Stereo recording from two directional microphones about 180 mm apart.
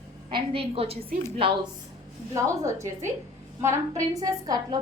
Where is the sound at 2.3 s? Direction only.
15° right (ahead or behind).